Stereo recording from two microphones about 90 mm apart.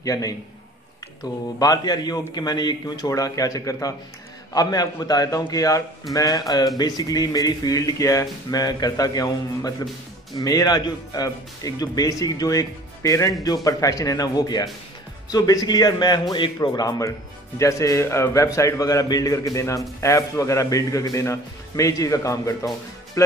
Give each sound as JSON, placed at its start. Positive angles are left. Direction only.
{"t": 0.0, "sound": "speech", "side_deg": 40}
{"t": 1.6, "sound": "speech", "side_deg": 45}
{"t": 16.6, "sound": "speech", "side_deg": 45}